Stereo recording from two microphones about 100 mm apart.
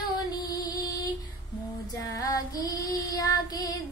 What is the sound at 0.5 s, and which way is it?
Music, 40° left (ahead or behind).